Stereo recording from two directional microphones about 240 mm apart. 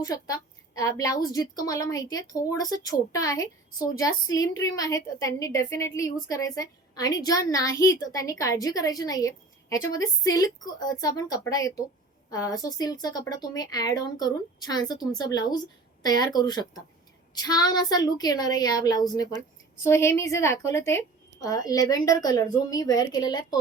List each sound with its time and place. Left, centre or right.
0.0 s a woman's voice: centre